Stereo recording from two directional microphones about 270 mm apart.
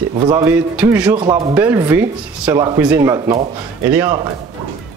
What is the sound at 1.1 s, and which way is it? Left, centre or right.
Speech, centre.